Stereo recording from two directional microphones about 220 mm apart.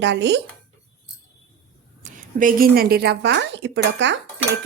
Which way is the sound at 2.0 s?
35° right (ahead or behind).